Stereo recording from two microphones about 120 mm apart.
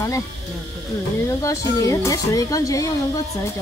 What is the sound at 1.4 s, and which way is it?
Speech, 25° left (ahead or behind).